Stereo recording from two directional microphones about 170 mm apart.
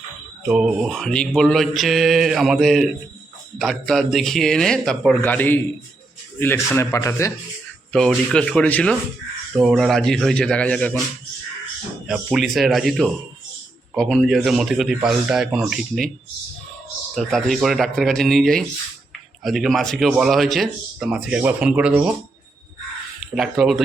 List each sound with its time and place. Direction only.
0.4 s a man's voice: 5° right (ahead or behind); by 7.3 s 15° left (ahead or behind)
7.9 s speech: 5° left (ahead or behind)
12.0 s speech: 5° right (ahead or behind)
17.2 s speech: centre (ahead or behind)
23.3 s speech: centre (ahead or behind)